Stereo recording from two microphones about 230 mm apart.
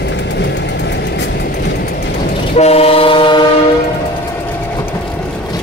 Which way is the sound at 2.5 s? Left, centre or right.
Left.